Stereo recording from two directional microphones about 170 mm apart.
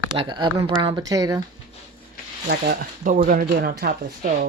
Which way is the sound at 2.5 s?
60° right (ahead or behind).